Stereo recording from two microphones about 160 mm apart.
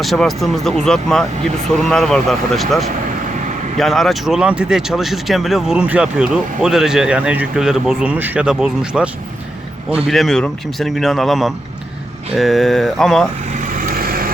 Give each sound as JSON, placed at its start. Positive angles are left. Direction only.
{"t": 0.0, "sound": "speech", "side_deg": 0}
{"t": 13.5, "sound": "vehicle", "side_deg": -55}